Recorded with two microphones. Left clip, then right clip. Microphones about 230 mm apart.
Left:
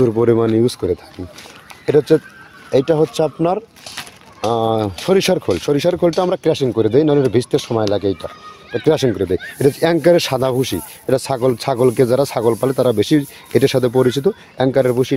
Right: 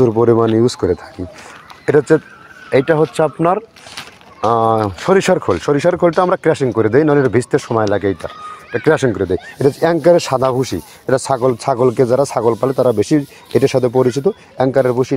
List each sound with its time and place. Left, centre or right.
0.0 s speech: centre
1.9 s speech: centre
3.2 s speech: centre
3.4 s speech: centre